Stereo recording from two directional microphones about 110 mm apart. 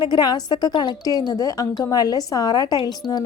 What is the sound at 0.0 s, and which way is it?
Speech, 40° left (ahead or behind).